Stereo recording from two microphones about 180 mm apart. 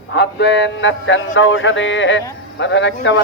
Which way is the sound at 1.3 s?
90° left.